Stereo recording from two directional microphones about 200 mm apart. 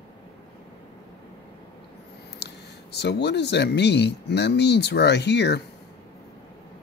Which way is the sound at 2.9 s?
55° left (ahead or behind).